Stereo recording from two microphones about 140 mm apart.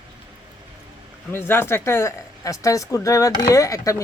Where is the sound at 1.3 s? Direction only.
15° left (ahead or behind).